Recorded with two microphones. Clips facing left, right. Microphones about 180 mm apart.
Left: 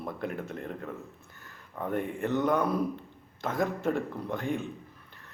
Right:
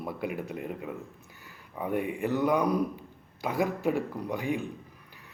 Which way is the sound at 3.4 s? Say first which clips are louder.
Right 1 dB; 5° right (ahead or behind).